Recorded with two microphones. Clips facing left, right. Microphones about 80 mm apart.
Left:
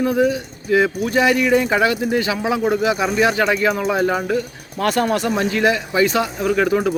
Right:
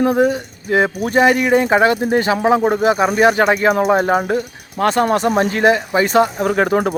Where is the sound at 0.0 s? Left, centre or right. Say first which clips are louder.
Right 3 dB; right.